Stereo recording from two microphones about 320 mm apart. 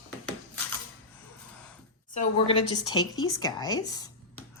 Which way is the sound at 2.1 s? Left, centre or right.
Centre.